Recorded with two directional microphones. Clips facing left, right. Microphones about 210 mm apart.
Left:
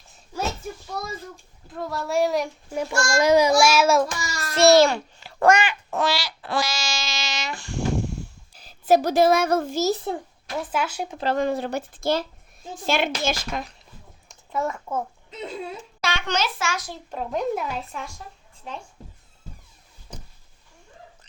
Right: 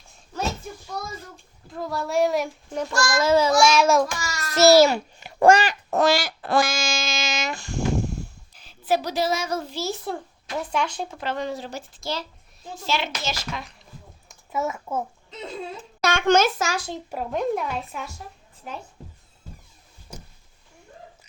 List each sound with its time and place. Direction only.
1.6 s a child's voice: centre (ahead or behind)
3.0 s child singing: 20° left (ahead or behind); by 4.1 s 5° left (ahead or behind)
4.2 s child singing: 30° left (ahead or behind)
4.5 s a child's voice: 5° right (ahead or behind)
5.2 s a sound: 20° right (ahead or behind)
5.5 s a sound: 35° right (ahead or behind)
8.5 s a child's voice: 40° left (ahead or behind)
10.7 s child singing: 5° left (ahead or behind)
11.2 s speech: 40° left (ahead or behind)
11.4 s speech: 60° left (ahead or behind)
14.3 s speech: 5° right (ahead or behind)
16.0 s a child's voice: 50° right (ahead or behind)
17.1 s a child's voice: 5° right (ahead or behind)
20.1 s a sound: 10° right (ahead or behind)